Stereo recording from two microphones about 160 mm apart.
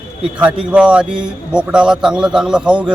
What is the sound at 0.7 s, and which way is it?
A man's voice, 5° right (ahead or behind).